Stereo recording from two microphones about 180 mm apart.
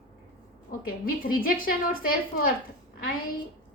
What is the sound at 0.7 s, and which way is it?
A woman's voice, 50° left (ahead or behind).